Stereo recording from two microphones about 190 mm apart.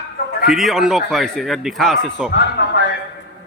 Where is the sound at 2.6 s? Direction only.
70° left (ahead or behind).